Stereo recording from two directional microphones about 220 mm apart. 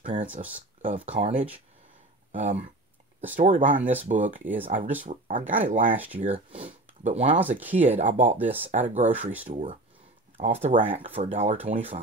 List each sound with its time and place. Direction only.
0.0 s speech: 35° right (ahead or behind)
5.9 s speech: 10° right (ahead or behind)
6.2 s speech: 25° right (ahead or behind)
7.3 s speech: 10° right (ahead or behind)
8.0 s speech: 35° right (ahead or behind)
8.4 s speech: 10° right (ahead or behind)
8.6 s speech: 30° right (ahead or behind)